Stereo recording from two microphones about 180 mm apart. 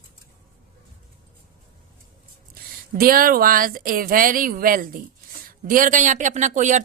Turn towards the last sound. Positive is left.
turn(degrees=-45)  # may be behind; listen again after turning